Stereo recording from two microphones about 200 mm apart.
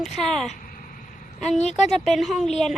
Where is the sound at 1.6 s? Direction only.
35° left (ahead or behind).